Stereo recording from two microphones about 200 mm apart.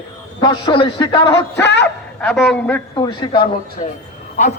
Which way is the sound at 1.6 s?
60° left (ahead or behind).